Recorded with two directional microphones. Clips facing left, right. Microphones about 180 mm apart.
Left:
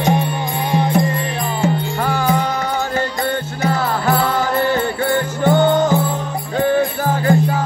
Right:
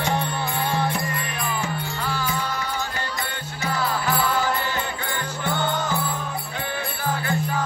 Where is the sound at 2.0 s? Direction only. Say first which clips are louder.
Left 9 dB; 50° left (ahead or behind).